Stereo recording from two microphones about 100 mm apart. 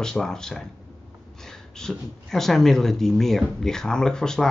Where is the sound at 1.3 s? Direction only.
5° left (ahead or behind).